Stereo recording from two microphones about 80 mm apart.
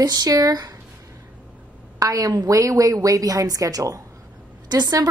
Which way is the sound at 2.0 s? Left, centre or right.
Right.